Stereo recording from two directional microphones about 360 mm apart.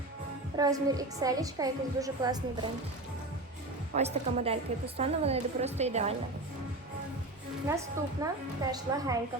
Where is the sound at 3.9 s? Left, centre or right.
Centre.